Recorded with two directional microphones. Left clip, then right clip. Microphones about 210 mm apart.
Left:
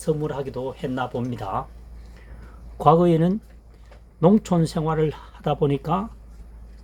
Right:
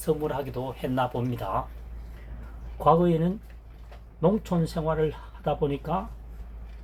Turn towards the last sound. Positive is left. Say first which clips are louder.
# left 5 dB
turn(degrees=60)  # may be behind; listen again after turning